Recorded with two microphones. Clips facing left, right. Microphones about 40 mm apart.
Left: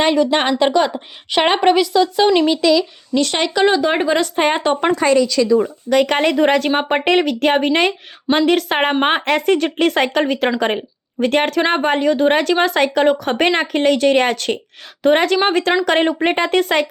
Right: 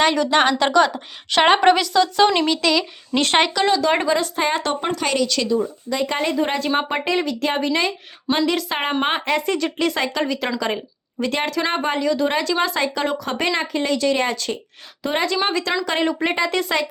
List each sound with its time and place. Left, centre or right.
0.0 s speech: centre
3.1 s speech: right
3.5 s speech: left
4.1 s speech: left
5.5 s speech: left
6.7 s speech: left
7.0 s speech: left
15.8 s speech: left